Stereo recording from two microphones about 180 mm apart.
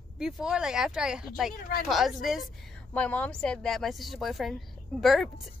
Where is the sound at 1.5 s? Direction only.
55° left (ahead or behind).